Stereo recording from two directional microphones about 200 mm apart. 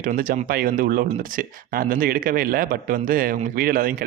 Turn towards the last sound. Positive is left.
turn(degrees=-45)  # may be behind; listen again after turning